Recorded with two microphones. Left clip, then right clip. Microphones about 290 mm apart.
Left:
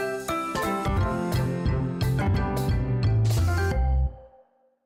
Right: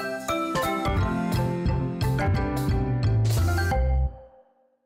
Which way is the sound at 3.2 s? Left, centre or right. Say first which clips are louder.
Right 1 dB; centre.